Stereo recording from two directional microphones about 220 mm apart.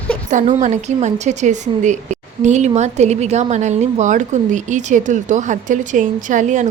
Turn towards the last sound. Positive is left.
turn(degrees=-35)  # may be behind; listen again after turning